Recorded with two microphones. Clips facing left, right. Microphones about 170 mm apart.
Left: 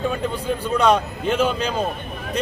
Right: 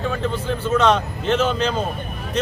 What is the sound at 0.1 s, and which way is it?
A man's voice, 15° left (ahead or behind).